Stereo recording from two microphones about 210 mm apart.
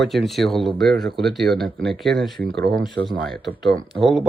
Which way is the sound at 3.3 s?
Centre (ahead or behind).